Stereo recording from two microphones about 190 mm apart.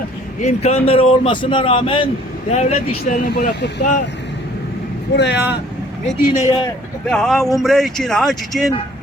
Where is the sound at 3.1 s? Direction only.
60° left (ahead or behind).